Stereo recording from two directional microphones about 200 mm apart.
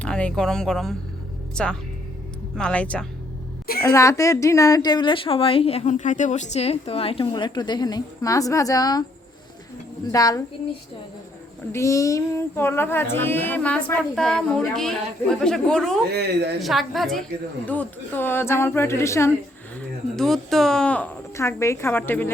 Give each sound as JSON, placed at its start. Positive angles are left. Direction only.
{"t": 0.0, "sound": "a woman's voice", "side_deg": 5}
{"t": 10.1, "sound": "female singing", "side_deg": 15}
{"t": 11.7, "sound": "female singing", "side_deg": 15}
{"t": 14.7, "sound": "a woman's voice", "side_deg": 0}
{"t": 16.1, "sound": "a woman's voice", "side_deg": -55}
{"t": 16.6, "sound": "a woman's voice", "side_deg": 0}
{"t": 17.7, "sound": "female singing", "side_deg": 10}
{"t": 19.7, "sound": "female singing", "side_deg": 0}